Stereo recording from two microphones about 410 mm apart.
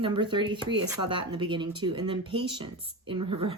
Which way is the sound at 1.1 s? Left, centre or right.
Centre.